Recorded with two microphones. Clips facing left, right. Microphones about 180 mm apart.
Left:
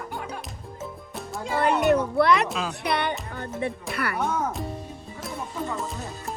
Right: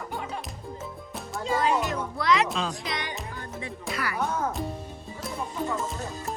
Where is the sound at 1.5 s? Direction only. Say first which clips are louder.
Left 5 dB; 65° left (ahead or behind).